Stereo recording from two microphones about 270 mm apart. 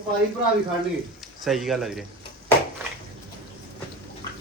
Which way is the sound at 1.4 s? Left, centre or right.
Centre.